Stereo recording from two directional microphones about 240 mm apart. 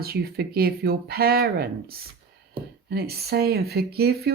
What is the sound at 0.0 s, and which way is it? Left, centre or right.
Speech, right.